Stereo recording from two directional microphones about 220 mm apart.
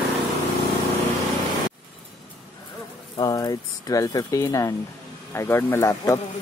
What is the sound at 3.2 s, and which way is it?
Speech, 15° left (ahead or behind).